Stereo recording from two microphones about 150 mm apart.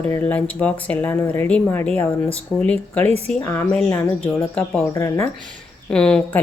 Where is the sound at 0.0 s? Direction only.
10° left (ahead or behind).